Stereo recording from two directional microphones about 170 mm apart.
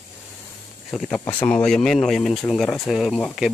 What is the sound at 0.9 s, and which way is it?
Speech, 5° left (ahead or behind).